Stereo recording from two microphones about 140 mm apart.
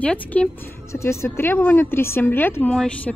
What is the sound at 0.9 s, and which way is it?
A woman's voice, 20° left (ahead or behind).